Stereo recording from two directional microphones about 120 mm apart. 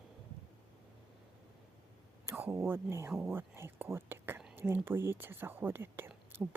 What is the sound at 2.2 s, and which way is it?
Speech, 20° right (ahead or behind).